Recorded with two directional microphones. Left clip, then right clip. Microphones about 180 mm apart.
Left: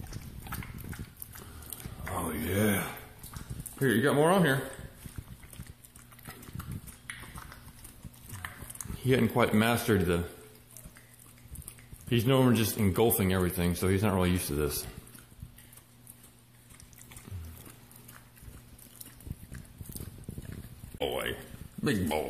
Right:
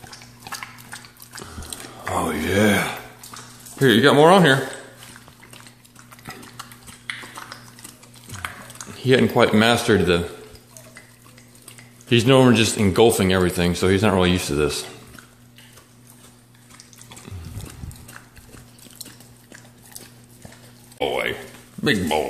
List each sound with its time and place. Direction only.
2.0 s speech: 15° right (ahead or behind)
6.3 s stir: 5° right (ahead or behind)
8.9 s a man's voice: centre (ahead or behind)
12.1 s speech: 10° right (ahead or behind)
21.0 s a sound: 10° left (ahead or behind)
21.8 s a man's voice: centre (ahead or behind)